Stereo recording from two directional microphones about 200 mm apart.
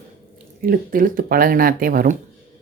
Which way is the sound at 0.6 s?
45° right (ahead or behind).